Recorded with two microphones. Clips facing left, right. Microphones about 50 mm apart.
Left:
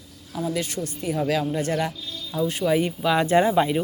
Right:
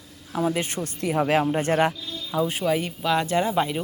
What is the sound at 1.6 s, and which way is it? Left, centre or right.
Speech, right.